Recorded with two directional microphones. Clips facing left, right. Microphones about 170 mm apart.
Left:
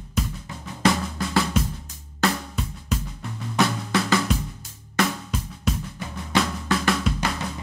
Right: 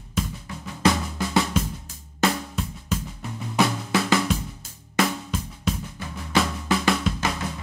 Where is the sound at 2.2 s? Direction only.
Centre (ahead or behind).